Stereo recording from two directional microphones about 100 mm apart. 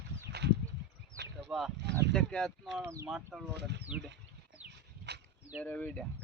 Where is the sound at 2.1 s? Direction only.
5° left (ahead or behind).